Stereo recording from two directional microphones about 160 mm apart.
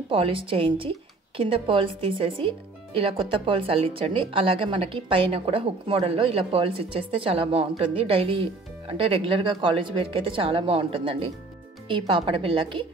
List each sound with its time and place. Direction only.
0.1 s a woman's voice: 35° right (ahead or behind)